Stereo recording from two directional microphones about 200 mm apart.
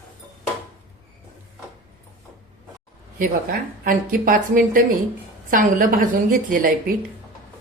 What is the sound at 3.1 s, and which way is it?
Speech, 45° right (ahead or behind).